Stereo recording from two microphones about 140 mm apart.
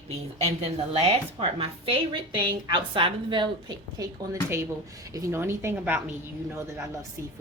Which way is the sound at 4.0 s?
20° right (ahead or behind).